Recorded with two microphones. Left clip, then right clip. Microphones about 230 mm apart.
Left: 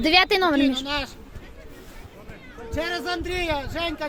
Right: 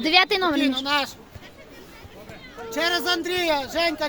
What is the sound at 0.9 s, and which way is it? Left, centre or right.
Speech, right.